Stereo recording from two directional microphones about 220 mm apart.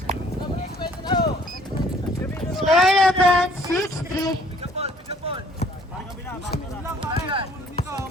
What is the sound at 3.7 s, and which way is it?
Music, 15° left (ahead or behind).